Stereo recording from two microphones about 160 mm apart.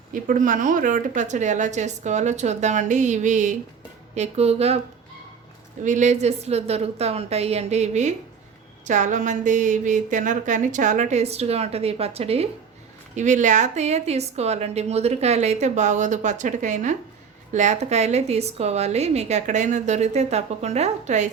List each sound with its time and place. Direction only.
0.1 s a woman's voice: 55° right (ahead or behind)
5.8 s a woman's voice: 50° right (ahead or behind)
13.1 s a woman's voice: 50° right (ahead or behind)